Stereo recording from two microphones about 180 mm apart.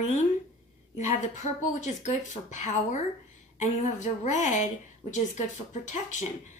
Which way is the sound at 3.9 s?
40° left (ahead or behind).